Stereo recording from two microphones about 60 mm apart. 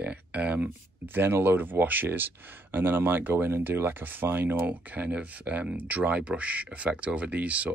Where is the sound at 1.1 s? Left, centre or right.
Right.